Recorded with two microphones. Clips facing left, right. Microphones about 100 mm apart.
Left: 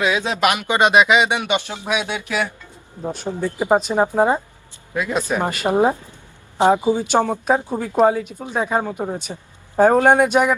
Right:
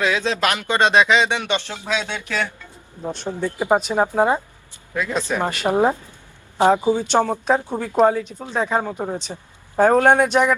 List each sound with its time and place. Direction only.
0.0 s a man's voice: 15° left (ahead or behind)
3.2 s a man's voice: 20° left (ahead or behind)
3.7 s speech: centre (ahead or behind)
4.9 s a man's voice: 15° left (ahead or behind)